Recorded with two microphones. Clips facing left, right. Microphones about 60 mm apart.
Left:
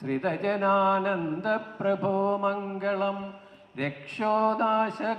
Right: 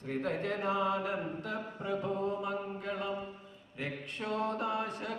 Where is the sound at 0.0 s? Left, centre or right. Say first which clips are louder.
Left 7 dB; left.